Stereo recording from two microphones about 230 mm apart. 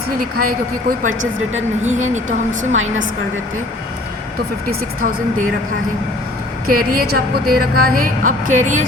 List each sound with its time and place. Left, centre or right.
0.9 s a woman's voice: right
2.7 s a woman's voice: right
4.6 s a woman's voice: right
6.7 s a woman's voice: right